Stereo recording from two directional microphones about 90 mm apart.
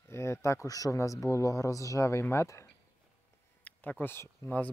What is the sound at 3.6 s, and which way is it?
Speech, 15° left (ahead or behind).